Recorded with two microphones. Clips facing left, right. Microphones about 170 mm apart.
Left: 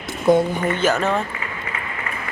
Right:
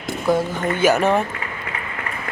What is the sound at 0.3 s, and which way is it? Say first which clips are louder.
Speech: left 4 dB; 20° left (ahead or behind).